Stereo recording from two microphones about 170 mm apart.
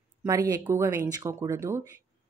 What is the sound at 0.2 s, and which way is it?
A woman's voice, 20° right (ahead or behind).